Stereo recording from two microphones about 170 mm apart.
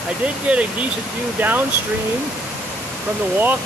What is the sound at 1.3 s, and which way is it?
Speech, 10° right (ahead or behind).